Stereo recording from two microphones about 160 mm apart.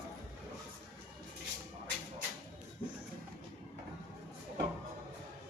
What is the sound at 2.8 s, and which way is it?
Music, 35° left (ahead or behind).